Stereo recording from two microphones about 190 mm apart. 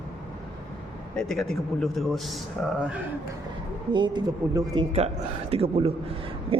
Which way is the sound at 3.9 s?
25° right (ahead or behind).